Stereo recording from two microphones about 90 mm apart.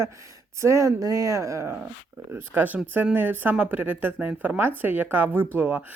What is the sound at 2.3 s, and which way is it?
Speech, 20° right (ahead or behind).